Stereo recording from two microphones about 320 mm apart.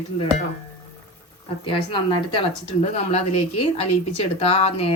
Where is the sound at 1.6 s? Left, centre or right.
Centre.